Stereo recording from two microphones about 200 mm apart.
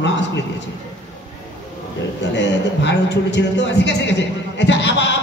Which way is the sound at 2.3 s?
60° left (ahead or behind).